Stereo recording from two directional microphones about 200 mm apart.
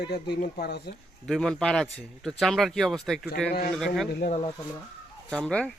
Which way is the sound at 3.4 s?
50° left (ahead or behind).